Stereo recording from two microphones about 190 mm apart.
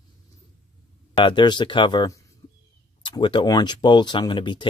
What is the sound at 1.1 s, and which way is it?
Speech, 25° left (ahead or behind).